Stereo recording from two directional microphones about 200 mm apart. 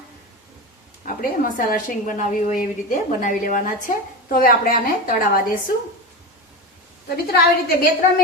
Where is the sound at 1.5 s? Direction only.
40° left (ahead or behind).